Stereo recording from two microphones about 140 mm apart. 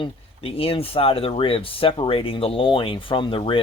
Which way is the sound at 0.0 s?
40° left (ahead or behind).